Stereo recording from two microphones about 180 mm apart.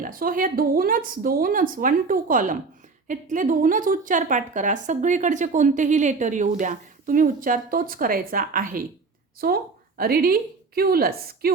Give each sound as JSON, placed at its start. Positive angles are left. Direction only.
{"t": 0.0, "sound": "a woman's voice", "side_deg": -50}